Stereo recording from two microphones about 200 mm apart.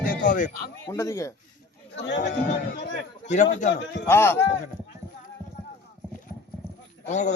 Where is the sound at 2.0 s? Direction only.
60° left (ahead or behind).